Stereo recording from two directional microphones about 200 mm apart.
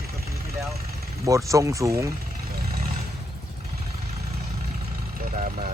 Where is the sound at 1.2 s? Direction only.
15° right (ahead or behind).